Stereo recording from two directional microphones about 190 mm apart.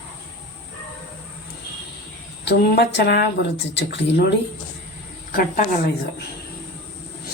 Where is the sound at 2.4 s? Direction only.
60° left (ahead or behind).